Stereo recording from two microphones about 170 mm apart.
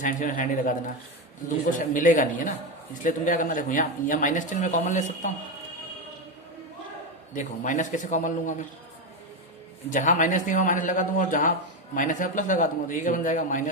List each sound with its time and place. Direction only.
0.0 s speech: 50° left (ahead or behind)
1.8 s speech: 50° left (ahead or behind)
7.3 s speech: 45° left (ahead or behind)
9.9 s speech: 50° left (ahead or behind)